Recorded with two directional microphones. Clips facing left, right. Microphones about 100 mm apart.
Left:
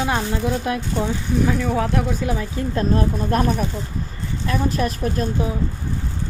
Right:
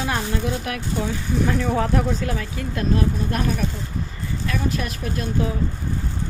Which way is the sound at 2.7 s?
40° left (ahead or behind).